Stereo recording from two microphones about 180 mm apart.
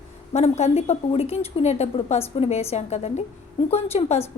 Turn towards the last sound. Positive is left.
turn(degrees=35)  # may be behind; listen again after turning